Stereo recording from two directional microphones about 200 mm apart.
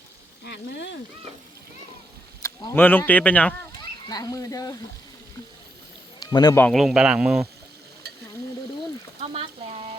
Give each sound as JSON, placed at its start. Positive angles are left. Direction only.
{"t": 0.4, "sound": "speech", "side_deg": 60}
{"t": 2.4, "sound": "speech", "side_deg": 15}
{"t": 4.1, "sound": "speech", "side_deg": 20}
{"t": 6.1, "sound": "speech", "side_deg": 20}
{"t": 6.7, "sound": "speech", "side_deg": 0}
{"t": 9.3, "sound": "a sound", "side_deg": -30}